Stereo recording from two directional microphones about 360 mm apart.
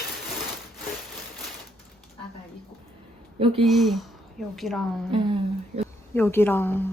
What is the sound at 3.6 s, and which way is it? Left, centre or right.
Speech, centre.